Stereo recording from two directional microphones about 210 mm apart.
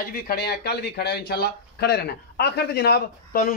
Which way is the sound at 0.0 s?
45° left (ahead or behind).